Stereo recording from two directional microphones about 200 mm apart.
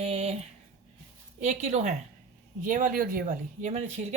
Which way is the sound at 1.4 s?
35° right (ahead or behind).